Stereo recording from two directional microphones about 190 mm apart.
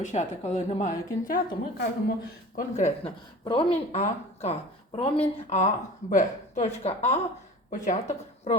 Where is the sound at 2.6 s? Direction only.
35° left (ahead or behind).